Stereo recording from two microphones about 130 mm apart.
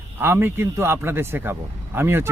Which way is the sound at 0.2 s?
15° right (ahead or behind).